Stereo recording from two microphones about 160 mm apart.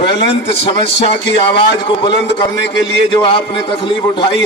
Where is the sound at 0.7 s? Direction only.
35° left (ahead or behind).